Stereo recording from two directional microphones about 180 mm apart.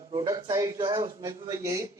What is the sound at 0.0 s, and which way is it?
A man's voice, 25° right (ahead or behind).